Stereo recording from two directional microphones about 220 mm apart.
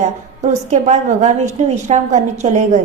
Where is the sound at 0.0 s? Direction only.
35° right (ahead or behind).